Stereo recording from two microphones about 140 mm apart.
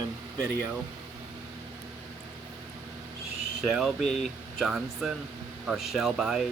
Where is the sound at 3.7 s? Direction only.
Centre (ahead or behind).